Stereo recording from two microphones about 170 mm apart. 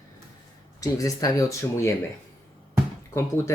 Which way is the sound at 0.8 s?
20° left (ahead or behind).